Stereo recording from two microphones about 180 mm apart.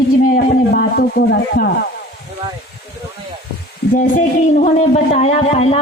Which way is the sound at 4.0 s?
45° left (ahead or behind).